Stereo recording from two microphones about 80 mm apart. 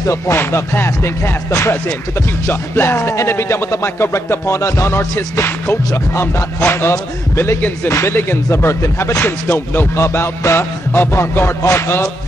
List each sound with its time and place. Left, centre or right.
0.0 s music: left